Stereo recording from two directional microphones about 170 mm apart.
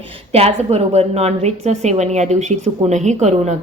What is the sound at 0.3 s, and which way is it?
A woman's voice, 35° right (ahead or behind).